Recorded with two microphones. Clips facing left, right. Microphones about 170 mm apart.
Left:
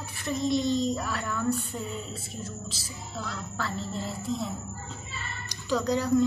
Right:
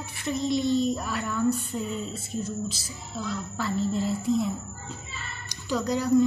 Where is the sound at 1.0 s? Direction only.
15° right (ahead or behind).